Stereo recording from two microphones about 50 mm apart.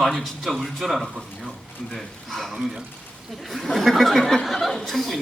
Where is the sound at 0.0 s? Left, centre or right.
Centre.